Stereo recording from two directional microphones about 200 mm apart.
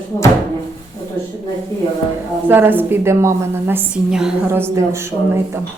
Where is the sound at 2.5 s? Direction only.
10° right (ahead or behind).